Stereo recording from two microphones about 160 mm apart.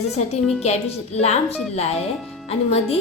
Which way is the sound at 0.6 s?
40° left (ahead or behind).